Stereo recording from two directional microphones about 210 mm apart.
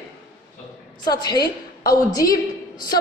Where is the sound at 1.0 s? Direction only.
20° left (ahead or behind).